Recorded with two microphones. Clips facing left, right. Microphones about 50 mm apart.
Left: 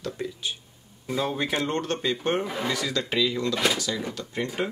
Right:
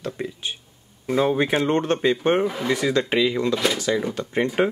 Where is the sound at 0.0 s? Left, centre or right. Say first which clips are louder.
Right 2 dB; right.